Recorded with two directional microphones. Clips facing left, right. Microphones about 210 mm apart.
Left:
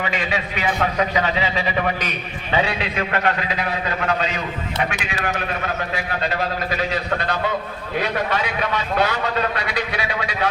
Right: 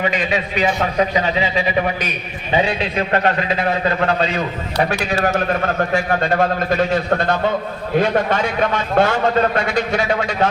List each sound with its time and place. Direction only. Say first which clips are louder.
0.1 s a man's voice: right 4 dB; 20° right (ahead or behind)
2.9 s a man's voice: right 4 dB; 30° right (ahead or behind)